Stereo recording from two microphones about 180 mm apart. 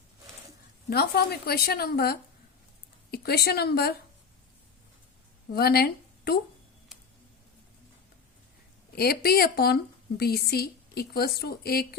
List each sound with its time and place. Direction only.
0.9 s a woman's voice: 60° left (ahead or behind)
5.5 s speech: 60° left (ahead or behind)
9.0 s a woman's voice: 60° left (ahead or behind)